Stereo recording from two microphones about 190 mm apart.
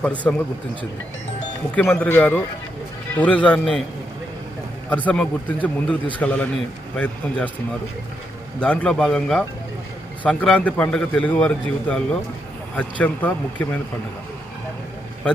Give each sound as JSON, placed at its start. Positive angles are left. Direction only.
{"t": 0.0, "sound": "a man's voice", "side_deg": 5}
{"t": 1.7, "sound": "a man's voice", "side_deg": 5}
{"t": 4.9, "sound": "a man's voice", "side_deg": 10}
{"t": 8.6, "sound": "a man's voice", "side_deg": 5}